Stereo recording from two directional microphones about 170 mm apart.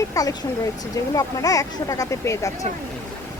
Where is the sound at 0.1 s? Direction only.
20° left (ahead or behind).